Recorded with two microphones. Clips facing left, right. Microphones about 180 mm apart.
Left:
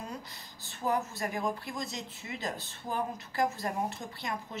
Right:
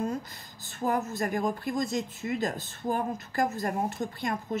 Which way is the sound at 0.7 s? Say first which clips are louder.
Right 3 dB; 45° right (ahead or behind).